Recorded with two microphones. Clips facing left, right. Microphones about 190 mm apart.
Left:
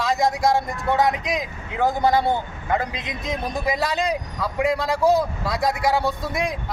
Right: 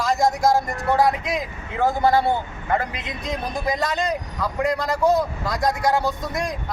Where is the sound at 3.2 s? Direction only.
5° left (ahead or behind).